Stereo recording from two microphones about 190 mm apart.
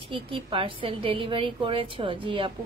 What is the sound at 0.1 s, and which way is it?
A woman's voice, 25° right (ahead or behind).